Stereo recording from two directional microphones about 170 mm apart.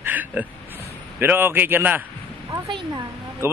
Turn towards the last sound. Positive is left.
turn(degrees=-15)  # may be behind; listen again after turning